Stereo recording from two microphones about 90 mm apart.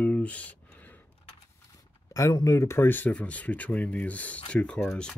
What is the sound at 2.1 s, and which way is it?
Speech, 35° left (ahead or behind).